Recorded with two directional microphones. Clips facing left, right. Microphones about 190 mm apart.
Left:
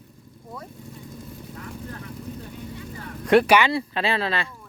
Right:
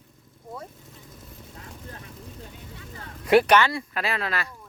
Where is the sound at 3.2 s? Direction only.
5° right (ahead or behind).